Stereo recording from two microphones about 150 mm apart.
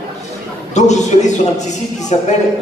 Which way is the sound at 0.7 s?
50° left (ahead or behind).